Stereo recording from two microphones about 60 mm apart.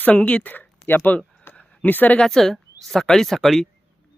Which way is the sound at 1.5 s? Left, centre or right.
Centre.